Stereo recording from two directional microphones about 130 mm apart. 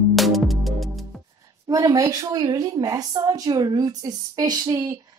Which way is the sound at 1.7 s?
30° right (ahead or behind).